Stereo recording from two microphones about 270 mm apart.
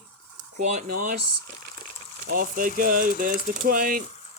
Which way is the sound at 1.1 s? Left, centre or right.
Right.